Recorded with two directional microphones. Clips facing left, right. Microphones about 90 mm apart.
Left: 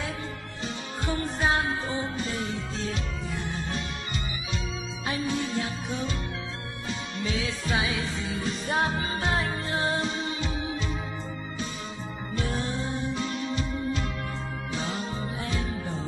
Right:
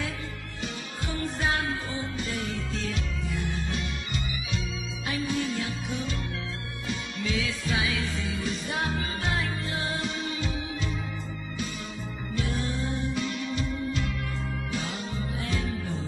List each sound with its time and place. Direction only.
1.1 s music: 30° left (ahead or behind)
5.0 s music: 30° left (ahead or behind)
7.2 s music: 30° left (ahead or behind)
12.4 s music: 35° left (ahead or behind)
14.7 s music: 30° left (ahead or behind)